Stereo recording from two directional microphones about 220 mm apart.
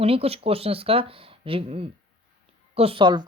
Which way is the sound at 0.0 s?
25° right (ahead or behind).